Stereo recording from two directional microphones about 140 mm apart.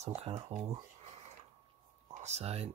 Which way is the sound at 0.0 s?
50° right (ahead or behind).